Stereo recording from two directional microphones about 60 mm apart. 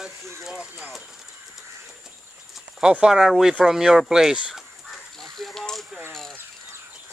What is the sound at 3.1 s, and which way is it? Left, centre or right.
Speech, centre.